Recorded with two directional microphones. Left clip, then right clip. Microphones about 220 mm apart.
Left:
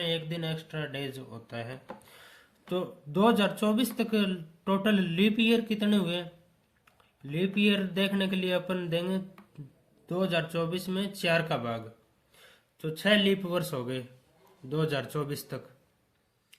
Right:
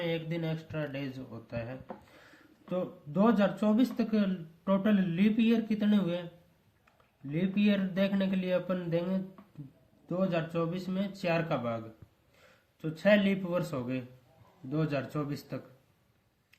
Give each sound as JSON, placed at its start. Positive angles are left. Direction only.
{"t": 0.0, "sound": "speech", "side_deg": 30}
{"t": 7.3, "sound": "speech", "side_deg": 30}
{"t": 12.8, "sound": "speech", "side_deg": 35}